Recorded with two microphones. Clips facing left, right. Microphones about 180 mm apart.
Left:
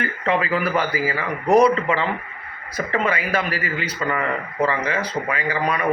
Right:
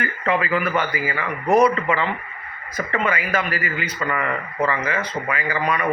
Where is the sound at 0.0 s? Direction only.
30° left (ahead or behind).